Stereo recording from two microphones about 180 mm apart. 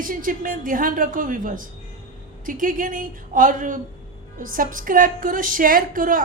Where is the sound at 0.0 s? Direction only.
50° right (ahead or behind).